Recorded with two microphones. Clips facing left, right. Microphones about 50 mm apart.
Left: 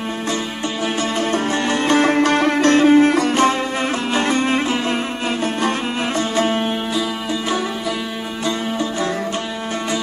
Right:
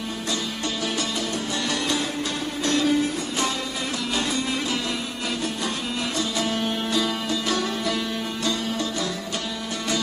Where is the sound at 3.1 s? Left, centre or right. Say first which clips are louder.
Left 11 dB; left.